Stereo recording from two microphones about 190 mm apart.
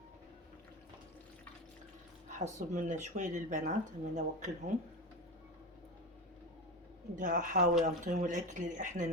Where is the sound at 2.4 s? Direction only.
40° right (ahead or behind).